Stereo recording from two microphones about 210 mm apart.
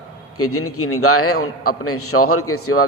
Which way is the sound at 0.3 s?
90° left.